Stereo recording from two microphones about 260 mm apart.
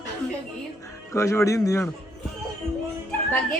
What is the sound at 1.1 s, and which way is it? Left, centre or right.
Speech, centre.